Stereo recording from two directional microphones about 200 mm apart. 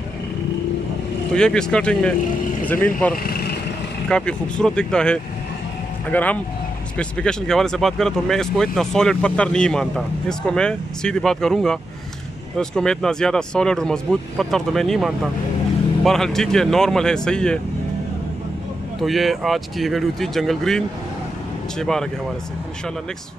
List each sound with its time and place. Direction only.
1.3 s speech: 5° left (ahead or behind)
3.3 s vehicle: 50° left (ahead or behind)
4.1 s speech: 5° left (ahead or behind)
18.9 s speech: centre (ahead or behind)